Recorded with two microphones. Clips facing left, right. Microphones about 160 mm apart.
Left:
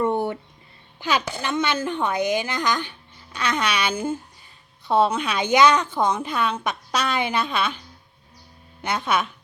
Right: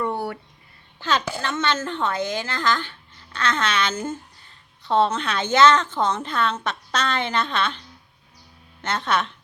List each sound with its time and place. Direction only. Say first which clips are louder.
0.0 s a sound: left 4 dB; 20° left (ahead or behind)
0.9 s a woman's voice: even; 15° left (ahead or behind)
8.8 s a woman's voice: even; 10° left (ahead or behind)